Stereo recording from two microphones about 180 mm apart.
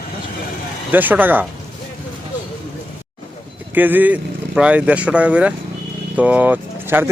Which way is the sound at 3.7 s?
10° right (ahead or behind).